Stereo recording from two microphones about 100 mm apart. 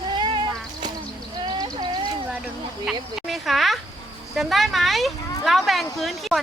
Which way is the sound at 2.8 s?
Centre (ahead or behind).